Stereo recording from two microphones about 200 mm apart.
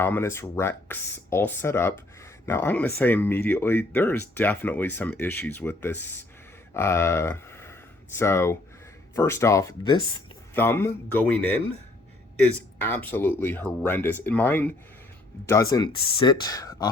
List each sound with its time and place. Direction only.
0.0 s speech: 10° left (ahead or behind)
10.5 s speech: 10° left (ahead or behind)
12.8 s speech: 10° left (ahead or behind)